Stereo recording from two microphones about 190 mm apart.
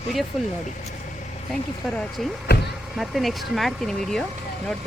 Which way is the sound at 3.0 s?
Centre (ahead or behind).